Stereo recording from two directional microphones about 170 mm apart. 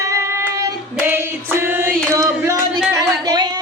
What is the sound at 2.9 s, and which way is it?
Singing, 20° right (ahead or behind).